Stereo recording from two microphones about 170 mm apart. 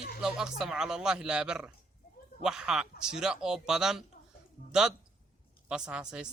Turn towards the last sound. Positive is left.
turn(degrees=-5)  # may be behind; listen again after turning